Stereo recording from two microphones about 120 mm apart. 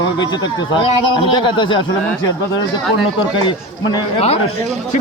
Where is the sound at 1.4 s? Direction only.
45° left (ahead or behind).